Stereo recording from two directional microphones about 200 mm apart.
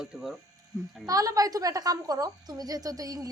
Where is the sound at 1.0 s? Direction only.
15° right (ahead or behind).